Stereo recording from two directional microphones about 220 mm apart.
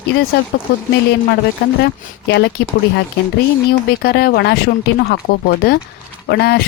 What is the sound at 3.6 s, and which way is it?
Speech, 45° left (ahead or behind).